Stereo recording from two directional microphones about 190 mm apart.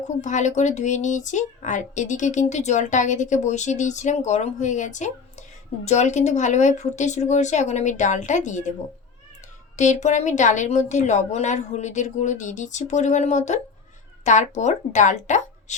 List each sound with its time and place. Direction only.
0.1 s speech: 40° left (ahead or behind)
9.7 s speech: 40° left (ahead or behind)